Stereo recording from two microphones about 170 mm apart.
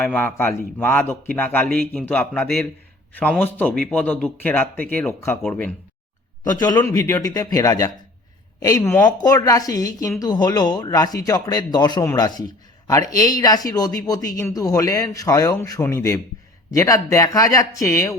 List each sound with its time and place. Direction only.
0.0 s speech: 10° left (ahead or behind)
6.4 s a woman's voice: 25° left (ahead or behind)